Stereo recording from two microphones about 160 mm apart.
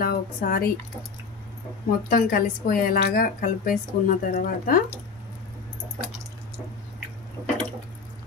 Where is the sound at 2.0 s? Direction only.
65° left (ahead or behind).